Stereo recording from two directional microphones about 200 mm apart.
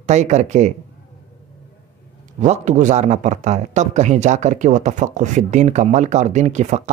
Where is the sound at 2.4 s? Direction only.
35° right (ahead or behind).